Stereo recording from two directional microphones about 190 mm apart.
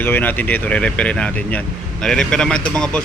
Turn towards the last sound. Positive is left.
turn(degrees=5)  # may be behind; listen again after turning